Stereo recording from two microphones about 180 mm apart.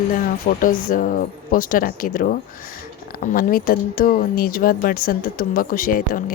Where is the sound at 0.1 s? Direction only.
50° left (ahead or behind).